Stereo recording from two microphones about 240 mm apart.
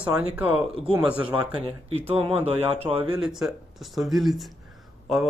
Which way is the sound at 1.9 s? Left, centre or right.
Right.